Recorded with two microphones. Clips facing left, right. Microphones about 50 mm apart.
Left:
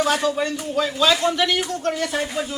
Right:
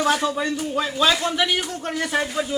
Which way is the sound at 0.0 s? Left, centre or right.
Centre.